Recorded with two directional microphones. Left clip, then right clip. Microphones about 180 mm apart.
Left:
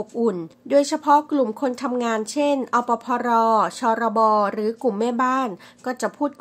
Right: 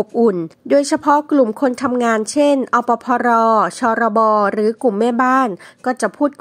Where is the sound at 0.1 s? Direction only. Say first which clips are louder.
Right 5 dB; 40° right (ahead or behind).